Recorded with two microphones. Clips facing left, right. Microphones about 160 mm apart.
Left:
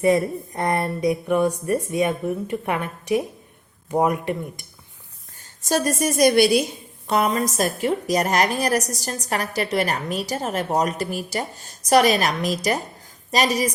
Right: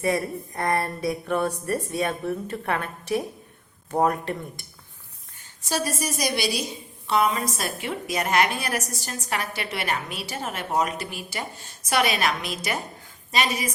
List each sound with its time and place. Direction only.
0.0 s a woman's voice: 20° left (ahead or behind)
5.6 s a woman's voice: 50° left (ahead or behind)